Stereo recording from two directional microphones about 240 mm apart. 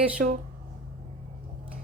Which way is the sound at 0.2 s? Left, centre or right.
Right.